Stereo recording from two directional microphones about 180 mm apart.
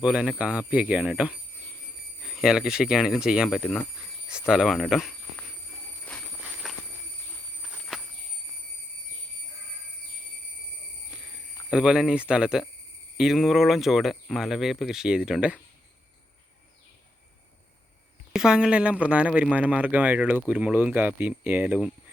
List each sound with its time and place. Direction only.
0.0 s speech: 5° right (ahead or behind)
3.6 s speech: 10° left (ahead or behind)
4.4 s speech: 5° right (ahead or behind)
6.1 s a sound: 5° left (ahead or behind)
11.7 s speech: 5° right (ahead or behind)
18.3 s speech: 5° right (ahead or behind)